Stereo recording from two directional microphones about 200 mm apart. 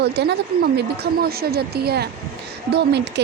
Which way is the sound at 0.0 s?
55° right (ahead or behind).